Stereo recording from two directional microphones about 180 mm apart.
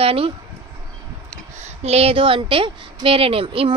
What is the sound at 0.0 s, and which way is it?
Speech, 30° right (ahead or behind).